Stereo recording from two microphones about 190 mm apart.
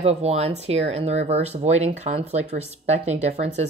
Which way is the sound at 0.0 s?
35° right (ahead or behind).